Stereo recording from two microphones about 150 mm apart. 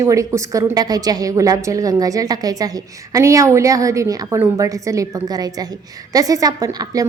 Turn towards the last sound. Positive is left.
turn(degrees=-25)  # may be behind; listen again after turning